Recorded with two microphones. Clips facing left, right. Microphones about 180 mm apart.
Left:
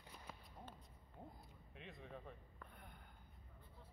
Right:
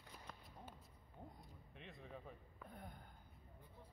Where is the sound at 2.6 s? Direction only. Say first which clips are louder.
Right 7 dB; 40° right (ahead or behind).